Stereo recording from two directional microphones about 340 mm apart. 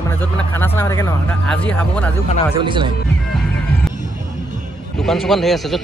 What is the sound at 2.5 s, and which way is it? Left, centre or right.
Speech, centre.